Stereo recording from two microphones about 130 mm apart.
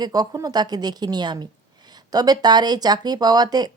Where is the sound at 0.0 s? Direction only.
30° right (ahead or behind).